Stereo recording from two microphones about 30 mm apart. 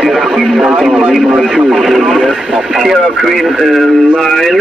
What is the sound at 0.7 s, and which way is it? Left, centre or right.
Speech, right.